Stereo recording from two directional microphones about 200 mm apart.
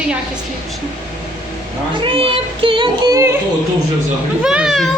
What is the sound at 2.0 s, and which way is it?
Speech, 25° right (ahead or behind).